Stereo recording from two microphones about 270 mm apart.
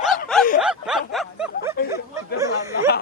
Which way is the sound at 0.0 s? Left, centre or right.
Centre.